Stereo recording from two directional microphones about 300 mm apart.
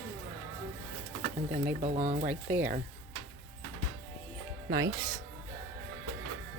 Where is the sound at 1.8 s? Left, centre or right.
Right.